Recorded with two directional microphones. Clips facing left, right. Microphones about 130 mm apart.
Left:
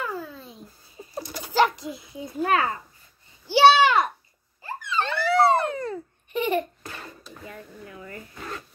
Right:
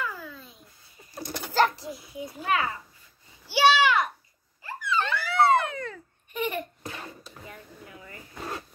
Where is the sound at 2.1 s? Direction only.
40° left (ahead or behind).